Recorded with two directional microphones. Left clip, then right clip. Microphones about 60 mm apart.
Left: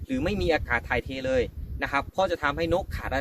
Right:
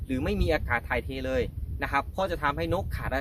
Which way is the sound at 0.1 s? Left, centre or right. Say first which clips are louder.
Left 2 dB; right.